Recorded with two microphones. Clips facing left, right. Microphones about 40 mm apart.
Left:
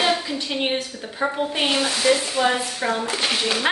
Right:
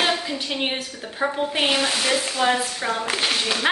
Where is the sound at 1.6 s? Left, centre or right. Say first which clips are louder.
Right 1 dB; right.